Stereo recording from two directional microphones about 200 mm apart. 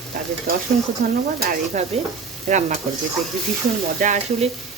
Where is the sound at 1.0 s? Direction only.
40° right (ahead or behind).